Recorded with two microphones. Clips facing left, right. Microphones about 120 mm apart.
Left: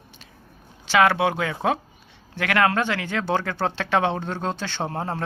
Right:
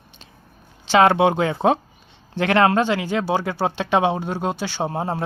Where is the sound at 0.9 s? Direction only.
30° right (ahead or behind).